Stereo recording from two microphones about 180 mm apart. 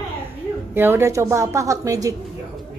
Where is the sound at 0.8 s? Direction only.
10° right (ahead or behind).